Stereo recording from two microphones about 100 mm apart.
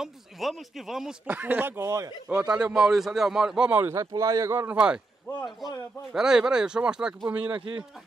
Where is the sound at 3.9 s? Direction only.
35° right (ahead or behind).